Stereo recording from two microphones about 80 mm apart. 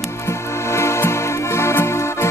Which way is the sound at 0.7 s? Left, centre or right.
Left.